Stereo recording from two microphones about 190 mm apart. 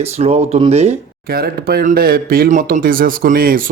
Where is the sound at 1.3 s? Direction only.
55° right (ahead or behind).